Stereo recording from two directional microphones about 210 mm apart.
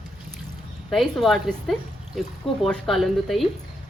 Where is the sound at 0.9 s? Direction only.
Centre (ahead or behind).